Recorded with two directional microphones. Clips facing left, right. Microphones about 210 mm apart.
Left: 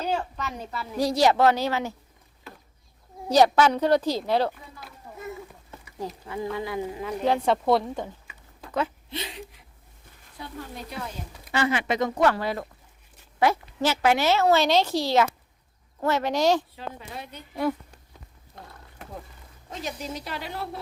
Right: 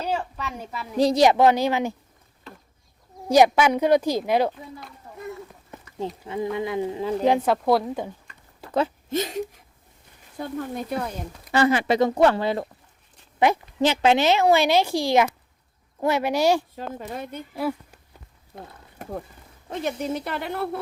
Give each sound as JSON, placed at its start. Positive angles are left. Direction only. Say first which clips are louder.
{"t": 0.3, "sound": "a woman's voice", "louder": "even", "side_deg": -5}
{"t": 0.9, "sound": "a woman's voice", "louder": "right 4 dB", "side_deg": -20}
{"t": 3.2, "sound": "a woman's voice", "louder": "right 2 dB", "side_deg": -10}
{"t": 4.8, "sound": "a sound", "louder": "right 2 dB", "side_deg": 5}
{"t": 6.2, "sound": "speech", "louder": "right 4 dB", "side_deg": -20}
{"t": 7.3, "sound": "a woman's voice", "louder": "right 1 dB", "side_deg": -5}
{"t": 8.3, "sound": "a sound", "louder": "even", "side_deg": 5}
{"t": 9.0, "sound": "speech", "louder": "right 10 dB", "side_deg": -45}
{"t": 11.5, "sound": "a woman's voice", "louder": "right 5 dB", "side_deg": -40}
{"t": 16.7, "sound": "speech", "louder": "right 5 dB", "side_deg": -45}
{"t": 17.5, "sound": "a woman's voice", "louder": "left 1 dB", "side_deg": -5}
{"t": 19.7, "sound": "speech", "louder": "right 7 dB", "side_deg": -55}